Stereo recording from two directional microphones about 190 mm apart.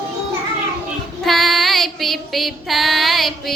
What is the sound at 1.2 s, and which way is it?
Child singing, centre (ahead or behind).